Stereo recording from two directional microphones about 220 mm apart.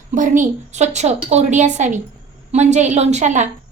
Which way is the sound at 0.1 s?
35° right (ahead or behind).